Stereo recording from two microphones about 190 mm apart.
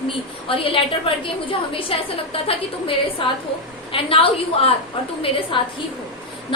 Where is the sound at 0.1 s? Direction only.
30° left (ahead or behind).